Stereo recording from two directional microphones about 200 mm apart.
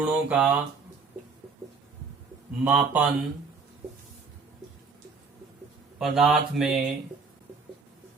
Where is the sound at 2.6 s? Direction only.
5° right (ahead or behind).